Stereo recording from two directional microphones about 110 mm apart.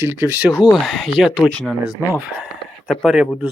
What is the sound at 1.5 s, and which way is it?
Speech, 5° left (ahead or behind).